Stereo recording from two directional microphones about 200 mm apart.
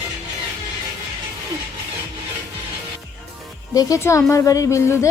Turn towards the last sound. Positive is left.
turn(degrees=15)  # may be behind; listen again after turning